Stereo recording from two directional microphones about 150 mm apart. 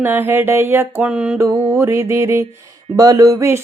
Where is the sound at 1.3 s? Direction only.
20° right (ahead or behind).